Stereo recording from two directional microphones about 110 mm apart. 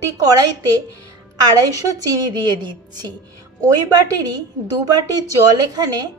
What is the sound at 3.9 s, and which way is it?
A woman's voice, 35° right (ahead or behind).